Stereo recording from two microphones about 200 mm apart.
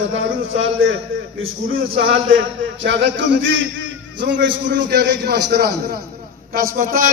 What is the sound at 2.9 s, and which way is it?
A man's voice, 60° right (ahead or behind).